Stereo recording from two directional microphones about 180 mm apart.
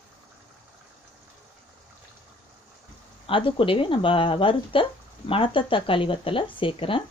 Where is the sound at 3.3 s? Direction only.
30° left (ahead or behind).